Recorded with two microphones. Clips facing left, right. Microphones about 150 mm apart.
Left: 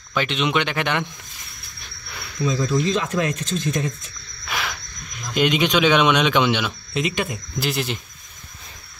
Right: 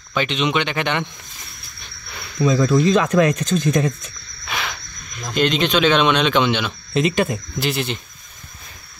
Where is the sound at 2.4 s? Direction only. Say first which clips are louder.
Right 5 dB; 70° right (ahead or behind).